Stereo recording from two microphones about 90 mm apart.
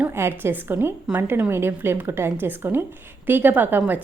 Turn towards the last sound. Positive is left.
turn(degrees=-20)  # may be behind; listen again after turning